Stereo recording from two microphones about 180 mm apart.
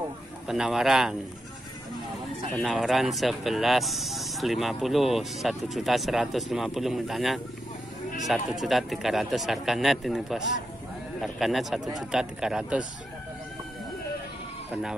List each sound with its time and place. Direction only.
0.5 s speech: 5° right (ahead or behind)
2.6 s speech: centre (ahead or behind)
14.7 s speech: 5° right (ahead or behind)